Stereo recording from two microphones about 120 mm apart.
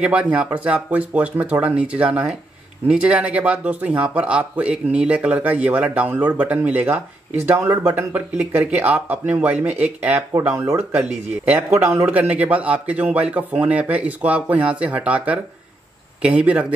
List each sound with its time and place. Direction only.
0.0 s speech: 10° right (ahead or behind)
12.1 s speech: 10° right (ahead or behind)